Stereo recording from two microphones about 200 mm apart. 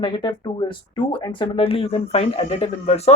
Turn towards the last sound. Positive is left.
turn(degrees=30)  # may be behind; listen again after turning